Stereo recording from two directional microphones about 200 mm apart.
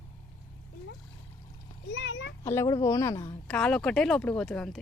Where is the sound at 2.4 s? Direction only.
15° left (ahead or behind).